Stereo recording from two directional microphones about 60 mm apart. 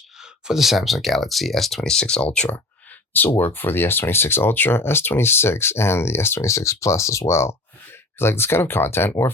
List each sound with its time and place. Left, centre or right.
0.2 s speech: centre; by 2.6 s left
3.2 s speech: left